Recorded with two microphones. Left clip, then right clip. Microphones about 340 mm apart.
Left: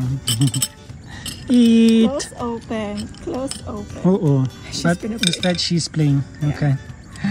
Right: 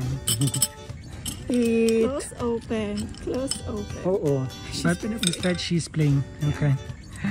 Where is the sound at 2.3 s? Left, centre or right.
Centre.